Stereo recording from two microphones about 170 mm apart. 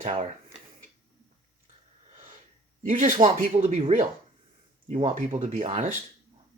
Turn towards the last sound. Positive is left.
turn(degrees=-45)  # may be behind; listen again after turning